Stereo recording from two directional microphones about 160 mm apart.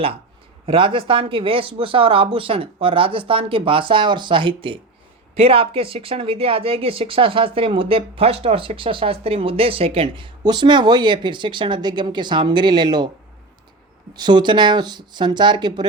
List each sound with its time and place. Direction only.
0.6 s speech: 35° right (ahead or behind)
14.2 s speech: 30° right (ahead or behind)